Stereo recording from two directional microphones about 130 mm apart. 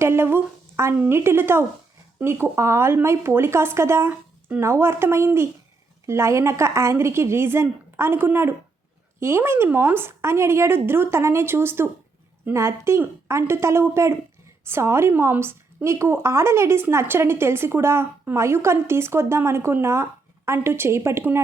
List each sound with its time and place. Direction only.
0.0 s a woman's voice: 20° right (ahead or behind)